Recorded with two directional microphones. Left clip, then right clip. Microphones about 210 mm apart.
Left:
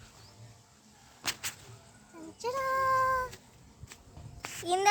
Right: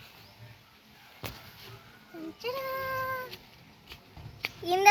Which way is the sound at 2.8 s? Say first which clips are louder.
Left 6 dB; 25° left (ahead or behind).